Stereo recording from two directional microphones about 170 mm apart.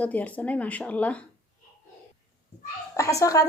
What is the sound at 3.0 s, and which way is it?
Speech, 20° left (ahead or behind).